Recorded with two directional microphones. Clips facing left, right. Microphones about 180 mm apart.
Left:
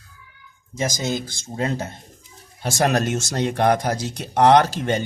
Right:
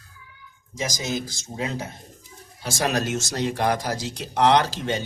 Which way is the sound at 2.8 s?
55° left (ahead or behind).